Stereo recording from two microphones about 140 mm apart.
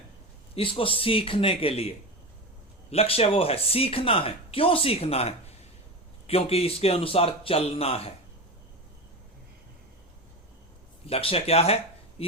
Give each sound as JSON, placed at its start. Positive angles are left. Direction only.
{"t": 0.5, "sound": "speech", "side_deg": 40}
{"t": 2.9, "sound": "speech", "side_deg": 45}
{"t": 11.0, "sound": "speech", "side_deg": 45}